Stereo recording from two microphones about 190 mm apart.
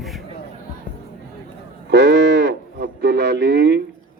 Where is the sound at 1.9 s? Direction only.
65° right (ahead or behind).